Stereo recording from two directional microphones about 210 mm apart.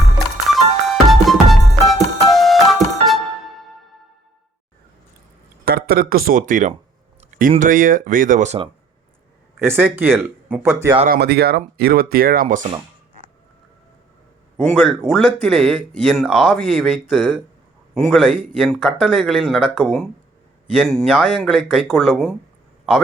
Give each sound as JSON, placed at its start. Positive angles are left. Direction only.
{"t": 0.4, "sound": "music", "side_deg": 0}
{"t": 5.6, "sound": "speech", "side_deg": -45}
{"t": 7.2, "sound": "a sound", "side_deg": -40}
{"t": 7.6, "sound": "speech", "side_deg": -40}
{"t": 9.6, "sound": "speech", "side_deg": -10}
{"t": 11.1, "sound": "speech", "side_deg": -50}
{"t": 14.5, "sound": "speech", "side_deg": 0}